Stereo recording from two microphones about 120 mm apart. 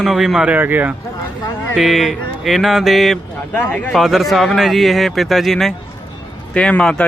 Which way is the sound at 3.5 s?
10° left (ahead or behind).